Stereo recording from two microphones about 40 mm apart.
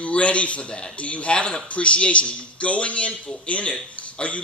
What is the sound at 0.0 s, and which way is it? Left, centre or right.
A man's voice, left.